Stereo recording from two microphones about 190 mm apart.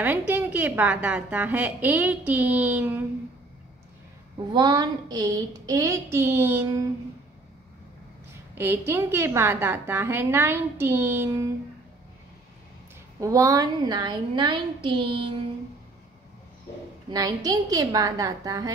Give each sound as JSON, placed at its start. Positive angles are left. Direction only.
{"t": 0.3, "sound": "a woman's voice", "side_deg": -10}
{"t": 4.6, "sound": "a woman's voice", "side_deg": -25}
{"t": 8.5, "sound": "a woman's voice", "side_deg": -10}
{"t": 13.2, "sound": "a woman's voice", "side_deg": -15}
{"t": 17.1, "sound": "a woman's voice", "side_deg": -20}